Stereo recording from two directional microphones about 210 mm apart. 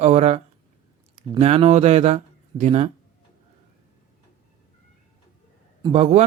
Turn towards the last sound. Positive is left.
turn(degrees=-30)  # may be behind; listen again after turning